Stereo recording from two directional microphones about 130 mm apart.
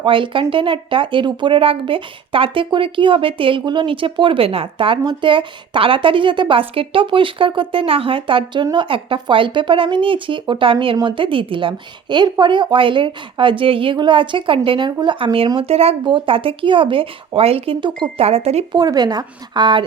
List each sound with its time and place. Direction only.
0.0 s speech: 40° right (ahead or behind)
18.3 s speech: 50° right (ahead or behind)
18.7 s speech: 30° right (ahead or behind)